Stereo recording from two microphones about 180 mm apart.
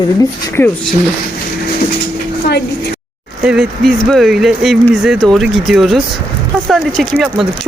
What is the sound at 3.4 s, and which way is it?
Speech, 5° right (ahead or behind).